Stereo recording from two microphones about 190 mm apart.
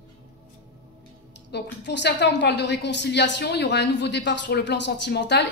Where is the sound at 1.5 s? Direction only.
65° left (ahead or behind).